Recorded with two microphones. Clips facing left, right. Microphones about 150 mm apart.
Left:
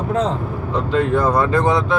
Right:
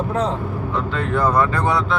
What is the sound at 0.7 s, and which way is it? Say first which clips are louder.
Speech: left 5 dB; 20° left (ahead or behind).